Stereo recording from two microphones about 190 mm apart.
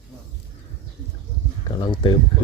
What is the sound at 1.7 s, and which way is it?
Speech, 25° left (ahead or behind).